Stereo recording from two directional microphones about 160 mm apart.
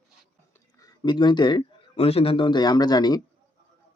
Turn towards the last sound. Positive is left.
turn(degrees=25)  # may be behind; listen again after turning